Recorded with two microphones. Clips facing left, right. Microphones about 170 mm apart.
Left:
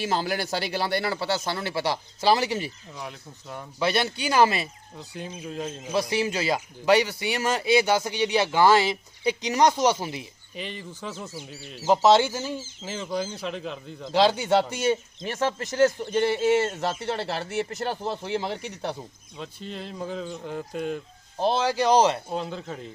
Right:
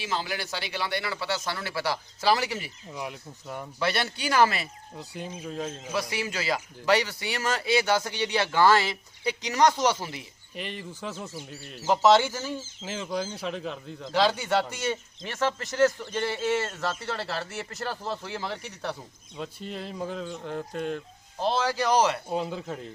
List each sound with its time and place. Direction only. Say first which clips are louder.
0.0 s speech: left 5 dB; 45° left (ahead or behind); by 2.7 s 25° left (ahead or behind)
2.9 s speech: right 2 dB; 10° right (ahead or behind)
3.8 s speech: left 4 dB; 15° left (ahead or behind)
4.9 s speech: left 1 dB; centre (ahead or behind)
5.8 s speech: left 8 dB; 25° left (ahead or behind)
10.5 s speech: even; centre (ahead or behind)
11.9 s speech: left 2 dB; 15° left (ahead or behind); by 14.1 s centre (ahead or behind)
14.1 s speech: left 4 dB; 20° left (ahead or behind)
15.2 s speech: left 2 dB; 30° left (ahead or behind)
19.4 s speech: right 1 dB; 5° right (ahead or behind)
21.6 s speech: left 4 dB; 20° left (ahead or behind)
22.3 s speech: right 1 dB; 5° right (ahead or behind)